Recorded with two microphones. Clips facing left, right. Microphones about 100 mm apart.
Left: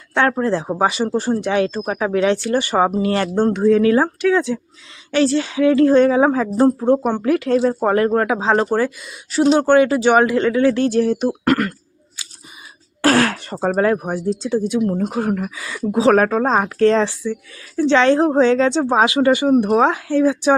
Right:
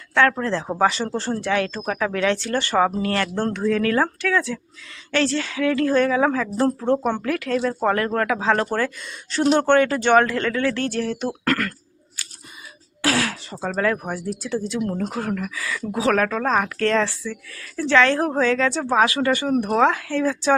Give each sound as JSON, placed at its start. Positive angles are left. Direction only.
{"t": 0.1, "sound": "speech", "side_deg": 20}
{"t": 7.2, "sound": "speech", "side_deg": 25}
{"t": 7.8, "sound": "speech", "side_deg": 15}
{"t": 13.0, "sound": "speech", "side_deg": 50}
{"t": 13.7, "sound": "speech", "side_deg": 30}
{"t": 14.0, "sound": "speech", "side_deg": 20}